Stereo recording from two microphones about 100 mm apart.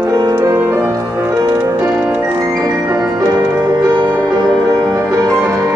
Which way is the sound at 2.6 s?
40° right (ahead or behind).